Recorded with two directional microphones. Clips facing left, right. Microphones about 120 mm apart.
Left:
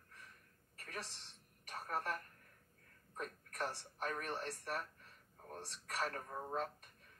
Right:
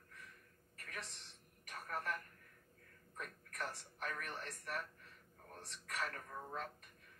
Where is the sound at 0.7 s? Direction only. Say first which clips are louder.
Left 2 dB; 30° left (ahead or behind).